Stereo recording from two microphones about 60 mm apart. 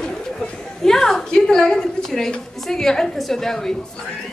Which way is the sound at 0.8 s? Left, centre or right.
Centre.